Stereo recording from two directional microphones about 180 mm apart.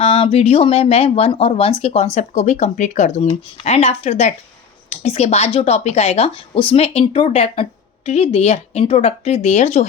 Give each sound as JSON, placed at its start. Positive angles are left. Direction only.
{"t": 0.0, "sound": "speech", "side_deg": 30}